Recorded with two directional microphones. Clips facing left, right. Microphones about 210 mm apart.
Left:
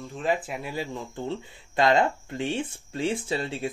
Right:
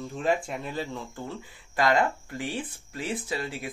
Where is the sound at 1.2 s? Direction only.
25° left (ahead or behind).